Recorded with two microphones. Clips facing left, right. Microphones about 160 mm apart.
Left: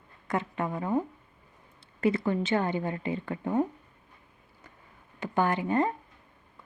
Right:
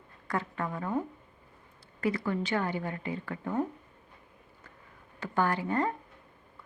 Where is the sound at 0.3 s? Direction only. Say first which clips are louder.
Left 3 dB; 20° left (ahead or behind).